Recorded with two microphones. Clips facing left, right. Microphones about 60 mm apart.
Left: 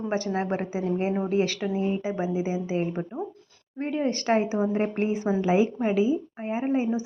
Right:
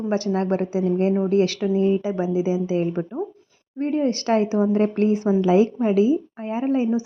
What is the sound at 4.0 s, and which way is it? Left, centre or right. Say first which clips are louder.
Speech: right 2 dB; left.